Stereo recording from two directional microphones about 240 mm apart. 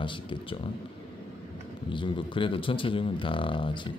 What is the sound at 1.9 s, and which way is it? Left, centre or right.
A man's voice, left.